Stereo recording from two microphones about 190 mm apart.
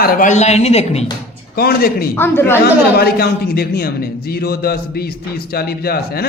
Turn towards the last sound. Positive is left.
turn(degrees=55)  # may be behind; listen again after turning